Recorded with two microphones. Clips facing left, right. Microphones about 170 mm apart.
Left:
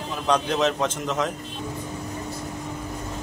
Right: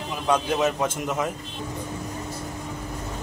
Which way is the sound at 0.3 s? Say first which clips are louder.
Even; 10° right (ahead or behind).